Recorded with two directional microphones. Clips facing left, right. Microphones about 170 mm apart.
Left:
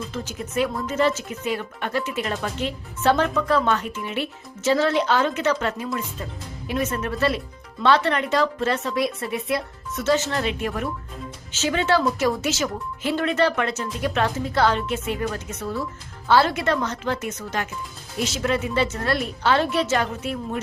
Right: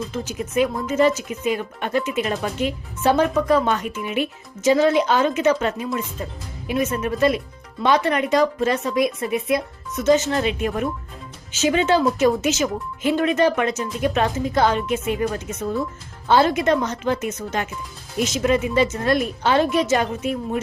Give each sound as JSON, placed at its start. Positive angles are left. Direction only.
{"t": 0.1, "sound": "speech", "side_deg": -15}
{"t": 16.3, "sound": "a woman's voice", "side_deg": -20}